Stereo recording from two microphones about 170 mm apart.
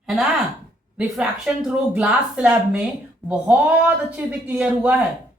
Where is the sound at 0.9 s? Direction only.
5° right (ahead or behind).